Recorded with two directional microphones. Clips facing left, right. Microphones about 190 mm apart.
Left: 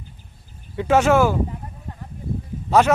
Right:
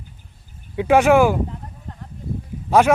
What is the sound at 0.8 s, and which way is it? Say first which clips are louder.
Speech: right 2 dB; 15° right (ahead or behind).